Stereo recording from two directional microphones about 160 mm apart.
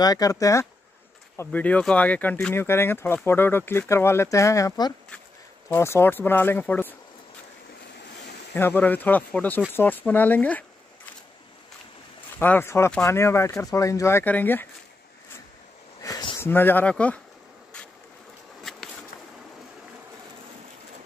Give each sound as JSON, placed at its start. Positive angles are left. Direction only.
{"t": 0.0, "sound": "speech", "side_deg": 25}
{"t": 8.5, "sound": "speech", "side_deg": 10}
{"t": 12.4, "sound": "speech", "side_deg": 15}
{"t": 16.0, "sound": "a sound", "side_deg": 25}
{"t": 16.3, "sound": "speech", "side_deg": 15}
{"t": 18.6, "sound": "boat", "side_deg": 0}